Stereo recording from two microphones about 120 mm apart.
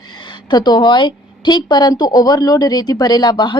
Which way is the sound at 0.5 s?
35° left (ahead or behind).